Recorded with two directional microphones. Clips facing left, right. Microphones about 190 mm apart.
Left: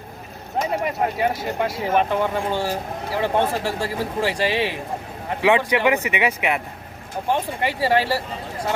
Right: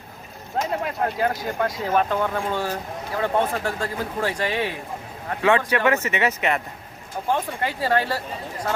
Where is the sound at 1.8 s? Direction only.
20° left (ahead or behind).